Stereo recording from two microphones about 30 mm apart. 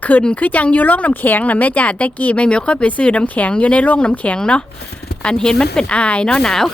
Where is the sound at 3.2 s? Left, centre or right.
Left.